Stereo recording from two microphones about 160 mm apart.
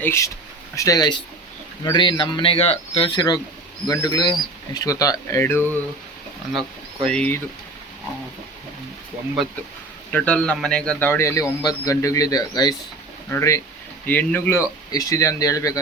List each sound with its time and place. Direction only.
0.0 s a man's voice: 15° left (ahead or behind)
7.0 s a man's voice: 5° left (ahead or behind)
10.1 s a man's voice: 5° left (ahead or behind)